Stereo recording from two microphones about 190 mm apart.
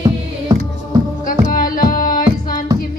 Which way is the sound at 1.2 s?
45° left (ahead or behind).